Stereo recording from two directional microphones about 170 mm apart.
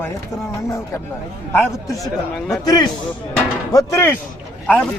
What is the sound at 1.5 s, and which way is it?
Speech, 15° left (ahead or behind).